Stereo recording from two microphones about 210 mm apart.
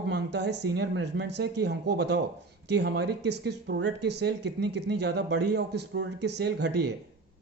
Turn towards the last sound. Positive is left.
turn(degrees=-55)  # may be behind; listen again after turning